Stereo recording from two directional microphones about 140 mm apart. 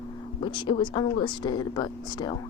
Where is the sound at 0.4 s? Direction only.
35° left (ahead or behind).